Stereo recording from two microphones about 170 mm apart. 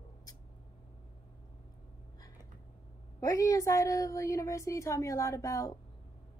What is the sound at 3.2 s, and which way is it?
A woman's voice, 20° left (ahead or behind).